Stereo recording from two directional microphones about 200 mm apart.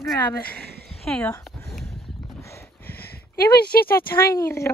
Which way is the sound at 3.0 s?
50° left (ahead or behind).